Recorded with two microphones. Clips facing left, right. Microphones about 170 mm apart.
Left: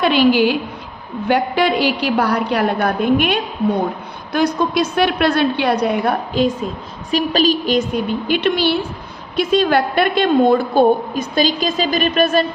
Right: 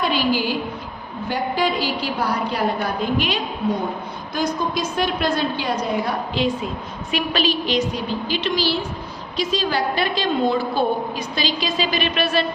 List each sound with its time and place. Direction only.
0.0 s a woman's voice: 70° left (ahead or behind)
6.4 s a woman's voice: 45° left (ahead or behind)